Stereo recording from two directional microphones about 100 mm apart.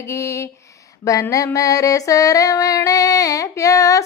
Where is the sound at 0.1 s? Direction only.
30° left (ahead or behind).